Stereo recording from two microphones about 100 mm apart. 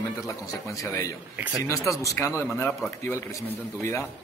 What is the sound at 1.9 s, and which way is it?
Speech, 30° left (ahead or behind).